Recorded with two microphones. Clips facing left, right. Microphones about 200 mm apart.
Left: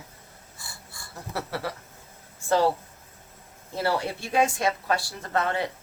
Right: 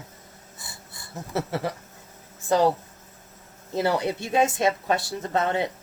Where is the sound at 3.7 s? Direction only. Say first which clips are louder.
Right 3 dB; 20° right (ahead or behind).